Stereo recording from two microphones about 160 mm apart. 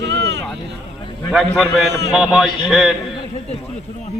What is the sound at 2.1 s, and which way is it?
Speech, centre (ahead or behind).